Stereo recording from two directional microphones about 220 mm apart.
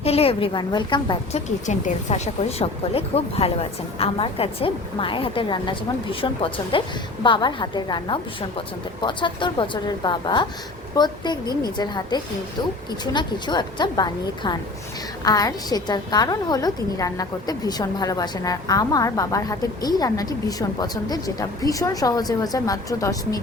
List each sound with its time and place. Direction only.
0.0 s speech: 25° left (ahead or behind)
1.5 s a woman's voice: 30° left (ahead or behind); by 23.4 s 15° left (ahead or behind)